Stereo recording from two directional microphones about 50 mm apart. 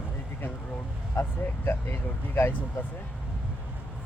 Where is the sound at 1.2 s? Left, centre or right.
Left.